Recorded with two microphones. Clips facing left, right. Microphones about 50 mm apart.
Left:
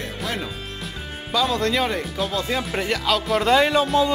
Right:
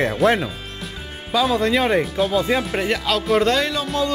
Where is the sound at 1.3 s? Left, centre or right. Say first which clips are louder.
Right 3 dB; centre.